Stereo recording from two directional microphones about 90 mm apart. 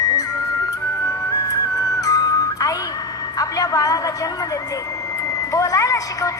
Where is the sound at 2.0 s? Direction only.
45° left (ahead or behind).